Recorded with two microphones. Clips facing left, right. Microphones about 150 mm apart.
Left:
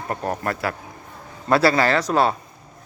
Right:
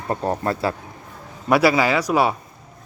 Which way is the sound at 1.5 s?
10° right (ahead or behind).